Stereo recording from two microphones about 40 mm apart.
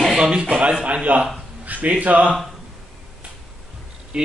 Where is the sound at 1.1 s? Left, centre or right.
Right.